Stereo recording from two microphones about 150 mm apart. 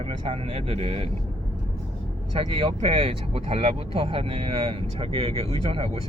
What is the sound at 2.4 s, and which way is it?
Speech, 35° right (ahead or behind).